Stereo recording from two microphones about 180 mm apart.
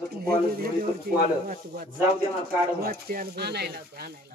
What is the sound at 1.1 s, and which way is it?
Speech, 60° right (ahead or behind).